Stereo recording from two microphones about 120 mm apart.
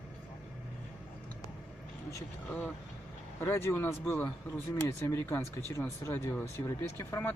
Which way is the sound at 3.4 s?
20° left (ahead or behind).